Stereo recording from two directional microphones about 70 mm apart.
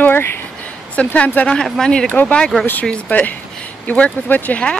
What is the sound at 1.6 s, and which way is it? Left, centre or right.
Speech, centre.